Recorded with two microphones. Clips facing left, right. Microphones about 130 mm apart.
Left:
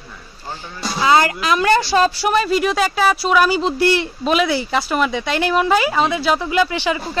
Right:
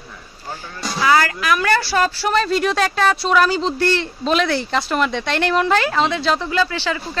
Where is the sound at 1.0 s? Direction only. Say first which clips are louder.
Left 1 dB; 20° left (ahead or behind).